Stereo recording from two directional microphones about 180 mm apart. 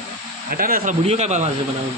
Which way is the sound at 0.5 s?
55° right (ahead or behind).